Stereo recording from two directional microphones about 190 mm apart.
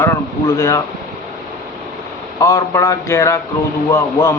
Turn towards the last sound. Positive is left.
turn(degrees=15)  # may be behind; listen again after turning